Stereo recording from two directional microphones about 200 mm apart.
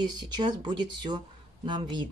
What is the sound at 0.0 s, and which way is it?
Speech, 20° right (ahead or behind).